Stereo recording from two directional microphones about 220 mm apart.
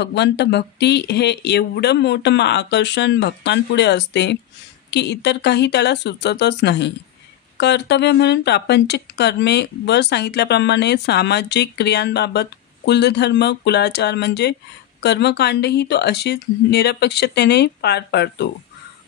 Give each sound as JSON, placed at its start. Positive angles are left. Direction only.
{"t": 0.0, "sound": "speech", "side_deg": 50}